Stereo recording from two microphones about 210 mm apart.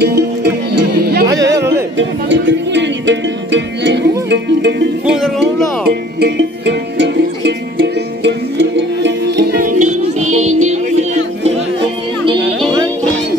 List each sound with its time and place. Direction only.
0.0 s music: 50° right (ahead or behind)
1.2 s chatter: 15° right (ahead or behind)
2.0 s music: 60° right (ahead or behind)
5.0 s music: 5° right (ahead or behind)
5.4 s music: 50° right (ahead or behind)
9.7 s music: 90° right
10.7 s music: 35° right (ahead or behind)